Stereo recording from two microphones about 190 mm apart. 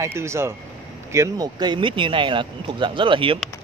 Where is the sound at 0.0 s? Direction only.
15° right (ahead or behind).